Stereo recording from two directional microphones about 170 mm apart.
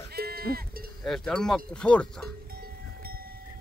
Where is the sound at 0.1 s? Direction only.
65° right (ahead or behind).